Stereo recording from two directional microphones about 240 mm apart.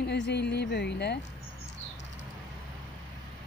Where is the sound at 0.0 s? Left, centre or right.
Left.